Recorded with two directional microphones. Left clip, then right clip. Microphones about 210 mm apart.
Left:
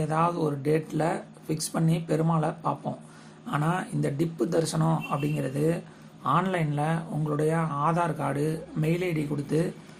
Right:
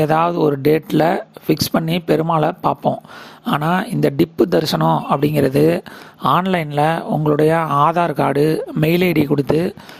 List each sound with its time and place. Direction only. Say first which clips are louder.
0.0 s speech: right 11 dB; 45° right (ahead or behind)